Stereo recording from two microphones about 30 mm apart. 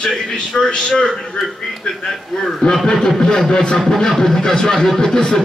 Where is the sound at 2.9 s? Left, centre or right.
Centre.